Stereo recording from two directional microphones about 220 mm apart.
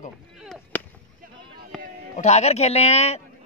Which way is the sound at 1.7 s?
Centre (ahead or behind).